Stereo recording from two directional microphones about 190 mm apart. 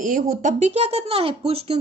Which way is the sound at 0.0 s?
45° right (ahead or behind).